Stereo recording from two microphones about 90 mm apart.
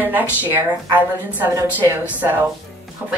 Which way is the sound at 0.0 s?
20° right (ahead or behind).